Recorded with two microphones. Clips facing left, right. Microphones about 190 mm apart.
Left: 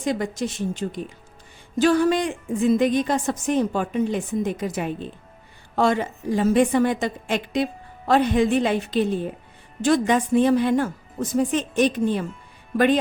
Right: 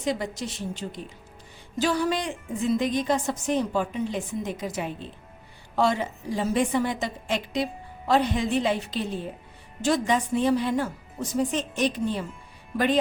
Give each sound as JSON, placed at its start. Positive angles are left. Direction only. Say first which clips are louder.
{"t": 0.0, "sound": "a woman's voice", "louder": "left 4 dB", "side_deg": 50}